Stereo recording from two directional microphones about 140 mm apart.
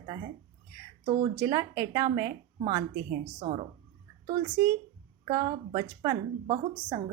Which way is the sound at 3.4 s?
50° right (ahead or behind).